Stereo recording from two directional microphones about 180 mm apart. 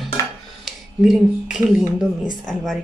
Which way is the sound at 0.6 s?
Centre (ahead or behind).